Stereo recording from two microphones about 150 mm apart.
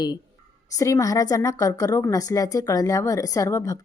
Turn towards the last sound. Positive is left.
turn(degrees=20)  # may be behind; listen again after turning